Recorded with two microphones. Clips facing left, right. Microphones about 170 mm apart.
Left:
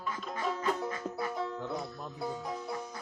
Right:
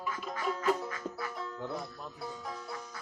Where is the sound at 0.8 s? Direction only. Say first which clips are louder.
Left 4 dB; 25° left (ahead or behind).